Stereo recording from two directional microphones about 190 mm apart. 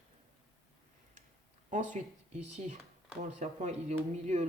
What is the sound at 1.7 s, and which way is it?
Speech, 40° right (ahead or behind).